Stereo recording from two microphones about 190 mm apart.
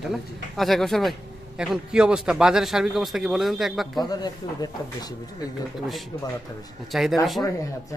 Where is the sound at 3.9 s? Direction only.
20° left (ahead or behind).